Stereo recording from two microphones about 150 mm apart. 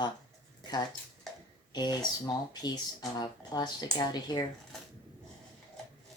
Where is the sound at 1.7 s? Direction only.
25° left (ahead or behind).